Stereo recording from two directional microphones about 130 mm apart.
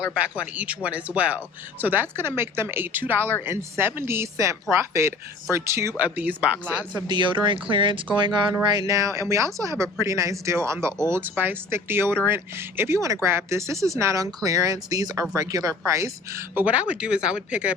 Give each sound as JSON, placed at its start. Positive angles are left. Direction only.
{"t": 0.2, "sound": "speech", "side_deg": -10}
{"t": 6.9, "sound": "speech", "side_deg": -35}
{"t": 16.6, "sound": "speech", "side_deg": -10}